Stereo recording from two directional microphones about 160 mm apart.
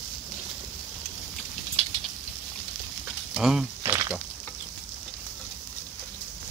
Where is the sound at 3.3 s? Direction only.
5° right (ahead or behind).